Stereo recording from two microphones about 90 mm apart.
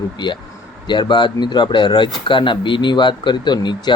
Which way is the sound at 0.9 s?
60° left (ahead or behind).